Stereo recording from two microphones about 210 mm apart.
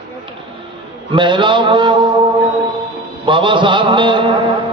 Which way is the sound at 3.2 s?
25° right (ahead or behind).